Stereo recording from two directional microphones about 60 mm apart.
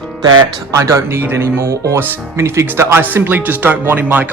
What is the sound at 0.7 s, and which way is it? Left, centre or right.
Speech, right.